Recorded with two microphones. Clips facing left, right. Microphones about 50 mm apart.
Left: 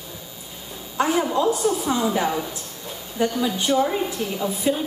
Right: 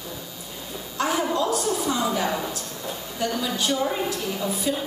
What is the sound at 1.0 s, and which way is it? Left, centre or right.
A woman's voice, centre.